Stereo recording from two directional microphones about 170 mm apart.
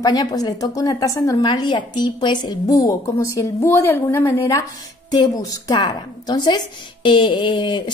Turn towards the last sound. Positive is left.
turn(degrees=30)  # may be behind; listen again after turning